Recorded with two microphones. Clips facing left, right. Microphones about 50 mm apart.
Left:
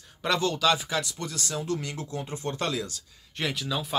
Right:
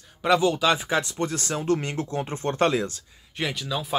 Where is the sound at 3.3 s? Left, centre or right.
Centre.